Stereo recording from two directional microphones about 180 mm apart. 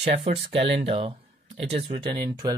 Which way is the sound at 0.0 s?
35° right (ahead or behind).